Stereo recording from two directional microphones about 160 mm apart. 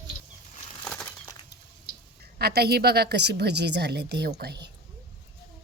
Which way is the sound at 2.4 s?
80° right.